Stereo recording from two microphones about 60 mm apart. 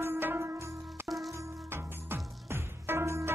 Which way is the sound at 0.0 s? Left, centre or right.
Right.